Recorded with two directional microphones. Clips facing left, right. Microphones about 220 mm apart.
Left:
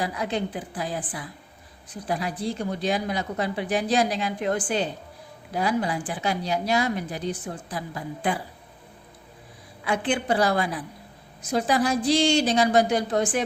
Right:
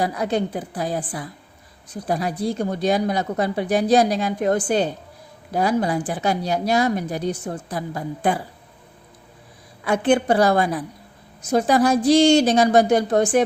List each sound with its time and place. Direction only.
0.0 s a woman's voice: 40° right (ahead or behind)
9.8 s speech: 45° right (ahead or behind)